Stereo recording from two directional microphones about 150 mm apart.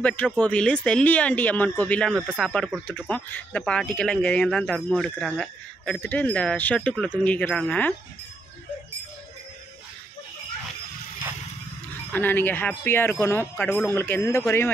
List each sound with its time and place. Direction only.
0.0 s speech: 10° left (ahead or behind)
12.1 s speech: 15° left (ahead or behind)